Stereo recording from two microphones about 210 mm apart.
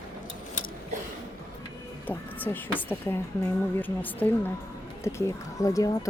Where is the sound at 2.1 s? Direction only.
10° left (ahead or behind).